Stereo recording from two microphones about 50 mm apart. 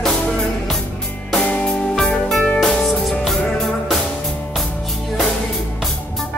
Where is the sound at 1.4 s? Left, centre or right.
Left; by 4.0 s centre.